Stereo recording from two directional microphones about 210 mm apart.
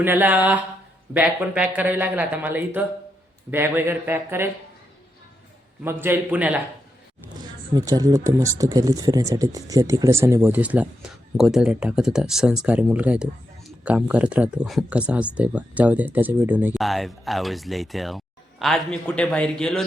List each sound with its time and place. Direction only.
0.0 s speech: 10° right (ahead or behind)
5.8 s speech: 10° right (ahead or behind)
7.7 s speech: 15° right (ahead or behind); by 19.8 s 5° left (ahead or behind)